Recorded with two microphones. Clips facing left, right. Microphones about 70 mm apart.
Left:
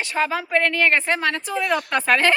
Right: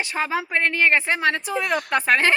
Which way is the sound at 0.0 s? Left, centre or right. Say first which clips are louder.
Left 2 dB; right.